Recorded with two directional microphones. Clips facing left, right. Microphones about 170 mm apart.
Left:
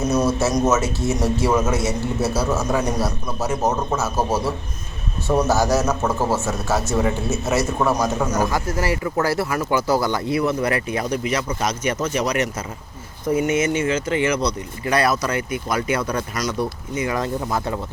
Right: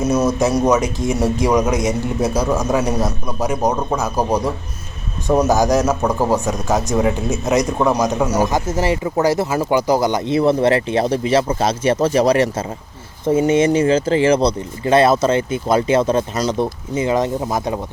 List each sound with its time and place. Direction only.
0.1 s a man's voice: 10° right (ahead or behind)